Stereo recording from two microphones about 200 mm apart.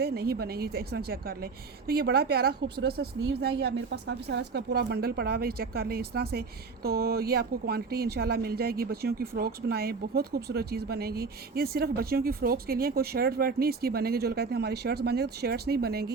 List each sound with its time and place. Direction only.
0.0 s speech: 50° right (ahead or behind)